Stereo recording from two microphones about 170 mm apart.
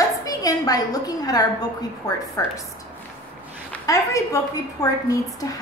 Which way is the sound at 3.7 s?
20° left (ahead or behind).